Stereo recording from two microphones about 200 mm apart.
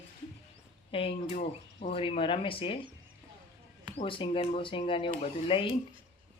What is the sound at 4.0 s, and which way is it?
Speech, 25° left (ahead or behind).